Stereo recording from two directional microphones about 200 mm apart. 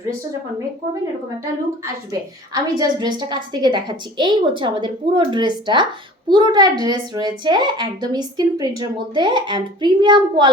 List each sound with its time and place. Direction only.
2.5 s a woman's voice: 20° right (ahead or behind)